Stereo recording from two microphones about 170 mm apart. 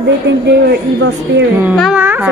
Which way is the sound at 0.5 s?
80° right.